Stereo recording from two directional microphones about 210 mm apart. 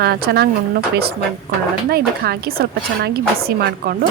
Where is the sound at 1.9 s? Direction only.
50° right (ahead or behind).